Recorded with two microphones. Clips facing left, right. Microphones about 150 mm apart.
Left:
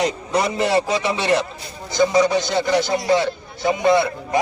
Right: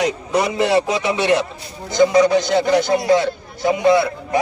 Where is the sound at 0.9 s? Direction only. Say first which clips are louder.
Right 2 dB; 15° right (ahead or behind).